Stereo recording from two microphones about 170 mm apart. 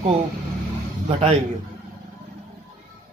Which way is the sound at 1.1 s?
40° right (ahead or behind).